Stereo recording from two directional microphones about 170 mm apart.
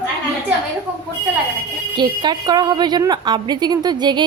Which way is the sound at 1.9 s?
25° right (ahead or behind).